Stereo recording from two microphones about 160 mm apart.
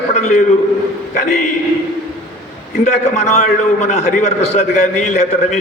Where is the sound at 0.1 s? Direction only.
45° left (ahead or behind).